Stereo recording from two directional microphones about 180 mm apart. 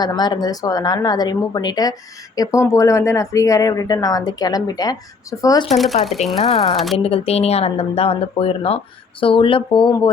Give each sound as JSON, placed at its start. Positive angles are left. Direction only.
{"t": 0.0, "sound": "speech", "side_deg": 25}
{"t": 5.7, "sound": "speech", "side_deg": 0}
{"t": 6.3, "sound": "speech", "side_deg": 35}
{"t": 6.7, "sound": "speech", "side_deg": 0}
{"t": 7.0, "sound": "speech", "side_deg": 35}